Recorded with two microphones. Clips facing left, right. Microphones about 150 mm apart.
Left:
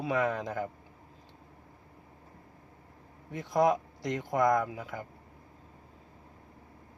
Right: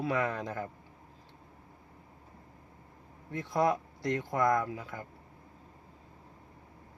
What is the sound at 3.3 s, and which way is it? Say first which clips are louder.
Speech: left 3 dB; 20° left (ahead or behind).